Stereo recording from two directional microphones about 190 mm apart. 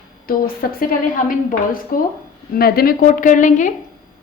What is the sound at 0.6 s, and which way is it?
Speech, 50° left (ahead or behind).